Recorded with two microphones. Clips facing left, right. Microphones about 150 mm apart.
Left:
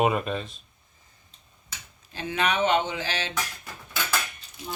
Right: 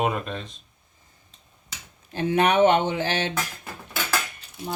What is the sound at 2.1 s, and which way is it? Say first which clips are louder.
Speech: right 7 dB; 55° right (ahead or behind).